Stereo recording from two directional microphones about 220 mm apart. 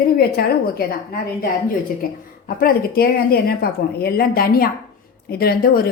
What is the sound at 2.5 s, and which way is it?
A woman's voice, 40° left (ahead or behind).